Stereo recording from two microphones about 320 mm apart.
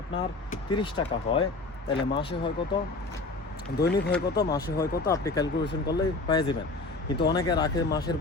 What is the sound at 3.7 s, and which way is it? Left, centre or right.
Speech, left.